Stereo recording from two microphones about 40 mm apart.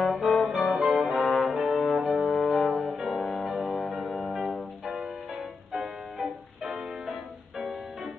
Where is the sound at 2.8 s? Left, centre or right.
Centre.